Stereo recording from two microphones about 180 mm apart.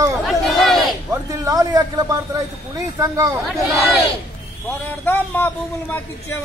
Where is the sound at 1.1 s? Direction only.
20° right (ahead or behind).